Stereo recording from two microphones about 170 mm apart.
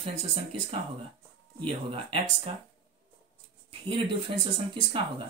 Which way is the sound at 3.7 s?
30° right (ahead or behind).